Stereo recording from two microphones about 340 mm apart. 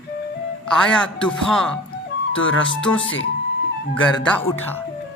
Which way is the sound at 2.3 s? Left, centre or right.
Left.